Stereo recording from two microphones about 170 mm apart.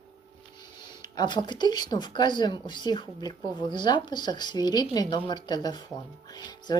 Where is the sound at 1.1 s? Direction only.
25° left (ahead or behind).